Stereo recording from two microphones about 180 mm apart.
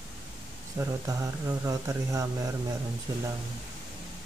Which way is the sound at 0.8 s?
15° right (ahead or behind).